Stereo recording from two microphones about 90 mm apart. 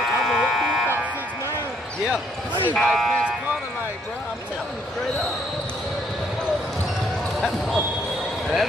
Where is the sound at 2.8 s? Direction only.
Centre (ahead or behind).